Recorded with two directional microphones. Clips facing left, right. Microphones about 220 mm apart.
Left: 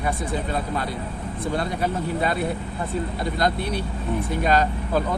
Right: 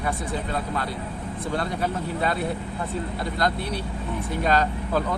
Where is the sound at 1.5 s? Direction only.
15° left (ahead or behind).